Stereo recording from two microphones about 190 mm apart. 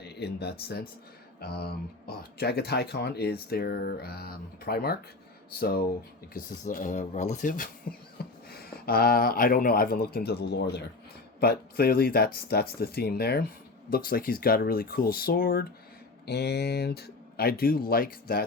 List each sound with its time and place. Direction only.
0.0 s speech: 60° left (ahead or behind)
8.2 s a sound: 55° left (ahead or behind)
8.5 s speech: 50° left (ahead or behind)